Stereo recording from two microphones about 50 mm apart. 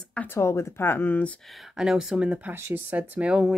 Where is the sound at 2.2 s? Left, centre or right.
Right.